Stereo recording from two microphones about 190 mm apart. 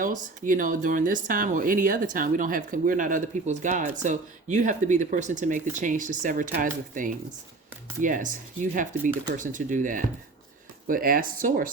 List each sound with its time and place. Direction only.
0.0 s speech: 45° right (ahead or behind)